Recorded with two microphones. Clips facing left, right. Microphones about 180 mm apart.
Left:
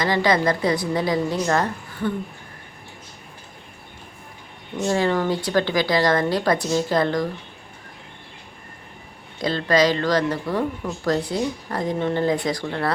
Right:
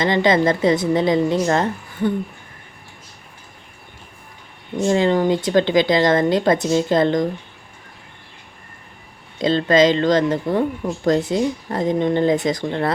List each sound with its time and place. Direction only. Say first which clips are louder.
0.0 s speech: right 3 dB; 20° right (ahead or behind)
4.9 s speech: right 4 dB; 20° right (ahead or behind)
9.4 s speech: right 4 dB; 20° right (ahead or behind)